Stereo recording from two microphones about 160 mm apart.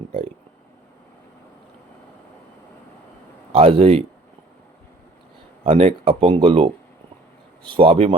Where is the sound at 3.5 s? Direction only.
40° right (ahead or behind).